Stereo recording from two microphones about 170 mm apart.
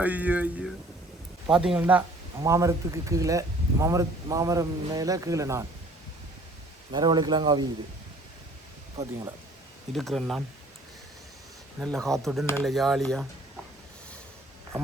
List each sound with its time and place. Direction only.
0.0 s speech: 10° right (ahead or behind)
6.9 s speech: 25° right (ahead or behind)
9.9 s speech: centre (ahead or behind)
11.8 s speech: centre (ahead or behind)